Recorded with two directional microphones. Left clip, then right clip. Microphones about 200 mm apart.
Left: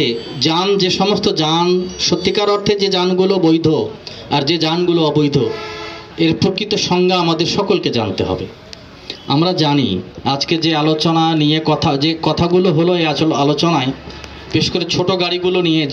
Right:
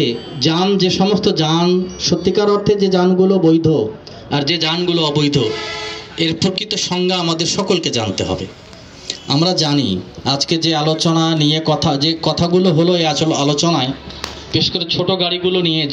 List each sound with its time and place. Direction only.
0.0 s a man's voice: 50° left (ahead or behind)